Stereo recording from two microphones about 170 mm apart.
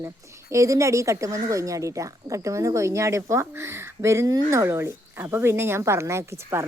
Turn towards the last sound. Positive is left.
turn(degrees=-15)  # may be behind; listen again after turning